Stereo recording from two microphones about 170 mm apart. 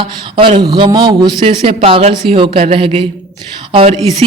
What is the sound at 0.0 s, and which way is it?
Speech, 30° right (ahead or behind).